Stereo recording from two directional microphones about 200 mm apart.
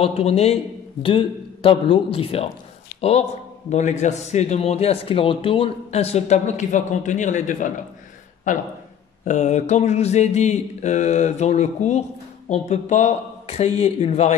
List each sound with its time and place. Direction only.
0.0 s a man's voice: 30° left (ahead or behind)